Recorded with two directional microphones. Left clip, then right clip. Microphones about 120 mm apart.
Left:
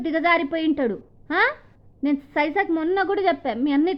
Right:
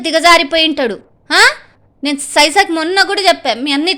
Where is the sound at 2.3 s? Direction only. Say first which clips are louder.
Right 14 dB; 55° right (ahead or behind).